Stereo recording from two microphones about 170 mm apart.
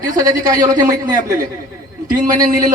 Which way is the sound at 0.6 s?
20° right (ahead or behind).